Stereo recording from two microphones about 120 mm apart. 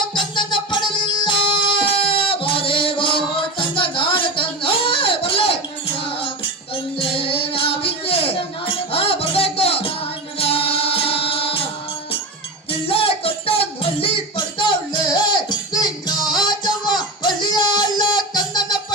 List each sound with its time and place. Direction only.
0.1 s music: 40° left (ahead or behind)
7.2 s music: 50° left (ahead or behind)
12.9 s music: 50° left (ahead or behind)